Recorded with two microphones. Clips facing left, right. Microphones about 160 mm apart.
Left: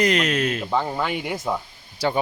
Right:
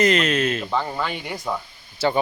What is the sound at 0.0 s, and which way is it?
Speech, 10° left (ahead or behind).